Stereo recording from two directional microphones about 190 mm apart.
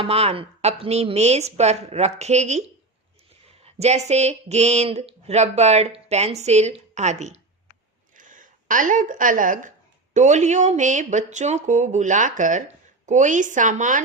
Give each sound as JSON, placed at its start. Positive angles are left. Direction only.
{"t": 0.0, "sound": "a woman's voice", "side_deg": -30}